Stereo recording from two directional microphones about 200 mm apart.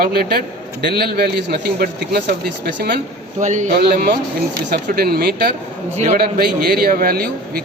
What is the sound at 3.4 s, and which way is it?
Speech, 40° right (ahead or behind).